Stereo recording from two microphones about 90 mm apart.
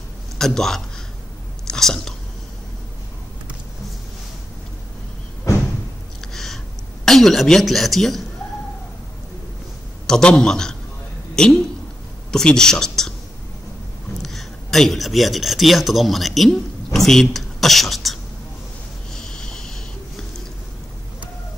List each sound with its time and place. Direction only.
0.4 s speech: 5° left (ahead or behind)
1.7 s whispering: 5° left (ahead or behind)
6.3 s a sound: 5° left (ahead or behind)
7.1 s speech: 5° left (ahead or behind)
10.0 s a man's voice: 10° left (ahead or behind)
14.2 s speech: 5° left (ahead or behind)
19.1 s snort: 5° left (ahead or behind)